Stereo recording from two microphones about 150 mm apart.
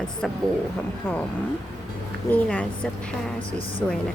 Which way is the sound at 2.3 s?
10° left (ahead or behind).